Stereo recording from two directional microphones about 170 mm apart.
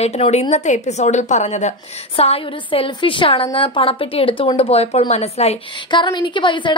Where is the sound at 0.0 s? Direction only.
40° left (ahead or behind).